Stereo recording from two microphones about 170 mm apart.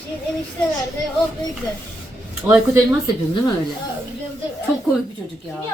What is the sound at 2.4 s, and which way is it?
Speech, 10° right (ahead or behind).